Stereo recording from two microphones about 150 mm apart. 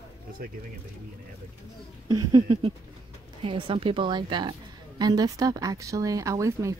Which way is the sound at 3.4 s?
35° right (ahead or behind).